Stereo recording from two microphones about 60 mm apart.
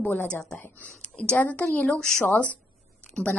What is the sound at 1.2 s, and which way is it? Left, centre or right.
Speech, left.